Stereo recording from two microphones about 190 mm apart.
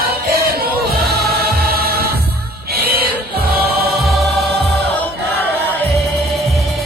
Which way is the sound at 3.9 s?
Centre (ahead or behind).